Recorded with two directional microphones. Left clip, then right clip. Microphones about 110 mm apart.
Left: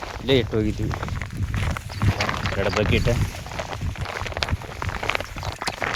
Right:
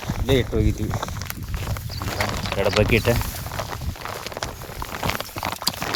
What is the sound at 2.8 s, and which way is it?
Speech, 35° right (ahead or behind).